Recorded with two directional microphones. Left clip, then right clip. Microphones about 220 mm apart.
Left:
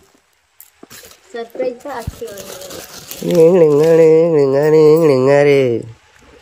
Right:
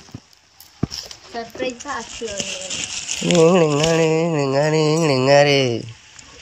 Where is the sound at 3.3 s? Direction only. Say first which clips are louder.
Left 5 dB; 5° left (ahead or behind).